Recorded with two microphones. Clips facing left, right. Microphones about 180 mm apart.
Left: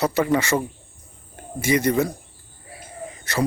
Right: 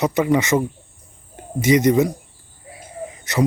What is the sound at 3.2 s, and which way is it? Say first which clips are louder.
Wheeze: right 4 dB; 20° right (ahead or behind).